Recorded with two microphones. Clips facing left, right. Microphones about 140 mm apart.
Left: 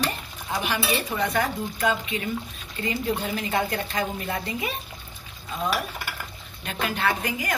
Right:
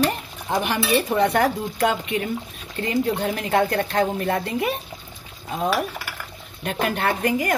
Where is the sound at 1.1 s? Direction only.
65° right (ahead or behind).